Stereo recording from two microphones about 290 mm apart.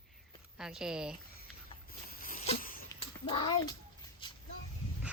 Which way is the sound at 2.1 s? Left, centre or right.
Left.